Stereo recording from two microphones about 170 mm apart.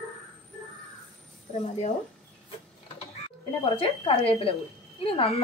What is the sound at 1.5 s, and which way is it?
Speech, 45° left (ahead or behind).